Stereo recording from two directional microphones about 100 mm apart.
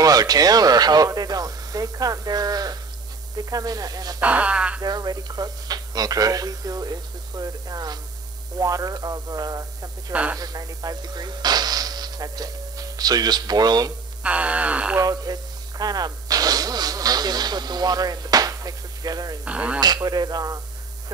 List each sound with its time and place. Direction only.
0.0 s speech: 40° right (ahead or behind)
4.2 s speech: 15° right (ahead or behind)
4.8 s speech: 40° right (ahead or behind)
10.1 s speech: 15° right (ahead or behind)
10.4 s speech: 40° right (ahead or behind)
14.2 s speech: 15° right (ahead or behind)
15.0 s speech: 40° right (ahead or behind)
19.4 s speech: 10° right (ahead or behind)
19.8 s speech: 40° right (ahead or behind)